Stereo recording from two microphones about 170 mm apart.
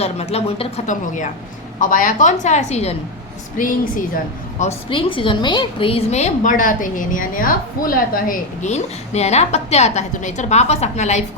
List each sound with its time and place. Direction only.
0.0 s a woman's voice: 35° left (ahead or behind)
3.6 s a woman's voice: 55° left (ahead or behind)
4.9 s a woman's voice: 30° left (ahead or behind); by 8.7 s 55° left (ahead or behind)
8.7 s a woman's voice: 40° left (ahead or behind)